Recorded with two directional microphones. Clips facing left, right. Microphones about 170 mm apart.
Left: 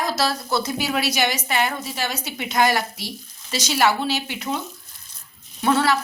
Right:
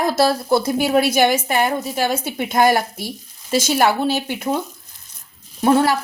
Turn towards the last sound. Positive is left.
turn(degrees=-45)  # may be behind; listen again after turning